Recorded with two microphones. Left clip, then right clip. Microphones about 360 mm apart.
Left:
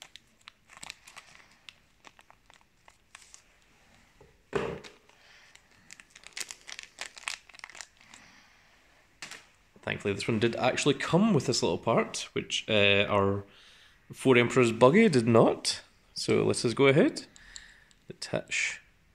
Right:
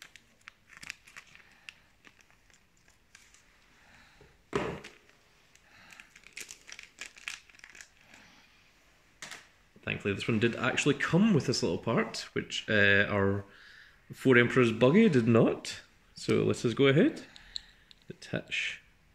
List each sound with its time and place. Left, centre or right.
0.0 s a sound: centre
6.2 s crumpling: centre
9.8 s speech: centre